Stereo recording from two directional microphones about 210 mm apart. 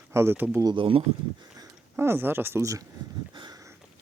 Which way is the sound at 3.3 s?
20° right (ahead or behind).